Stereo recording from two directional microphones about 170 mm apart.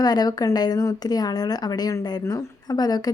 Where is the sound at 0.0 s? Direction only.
25° left (ahead or behind).